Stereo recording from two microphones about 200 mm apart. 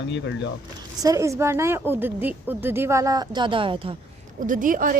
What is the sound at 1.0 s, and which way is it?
A woman's voice, 15° right (ahead or behind).